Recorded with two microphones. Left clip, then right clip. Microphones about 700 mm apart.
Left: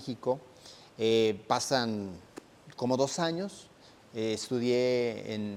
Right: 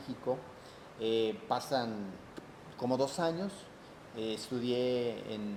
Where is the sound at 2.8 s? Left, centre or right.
Left.